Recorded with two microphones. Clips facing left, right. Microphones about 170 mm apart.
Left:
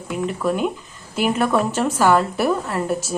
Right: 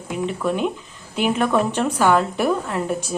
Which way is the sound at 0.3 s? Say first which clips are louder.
Left 1 dB; 5° left (ahead or behind).